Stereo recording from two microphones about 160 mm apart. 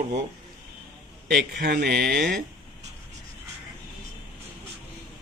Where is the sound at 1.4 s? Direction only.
90° right.